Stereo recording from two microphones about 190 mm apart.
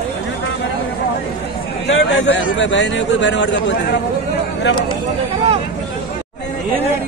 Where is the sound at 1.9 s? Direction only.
70° left (ahead or behind).